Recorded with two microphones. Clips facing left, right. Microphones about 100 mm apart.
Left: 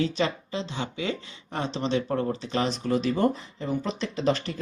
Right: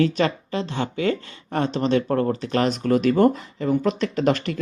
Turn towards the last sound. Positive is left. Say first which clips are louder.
# right 5 dB
turn(degrees=-70)  # may be behind; listen again after turning